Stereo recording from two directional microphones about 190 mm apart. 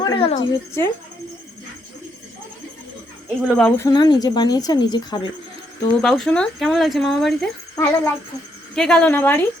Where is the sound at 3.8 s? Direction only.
20° left (ahead or behind).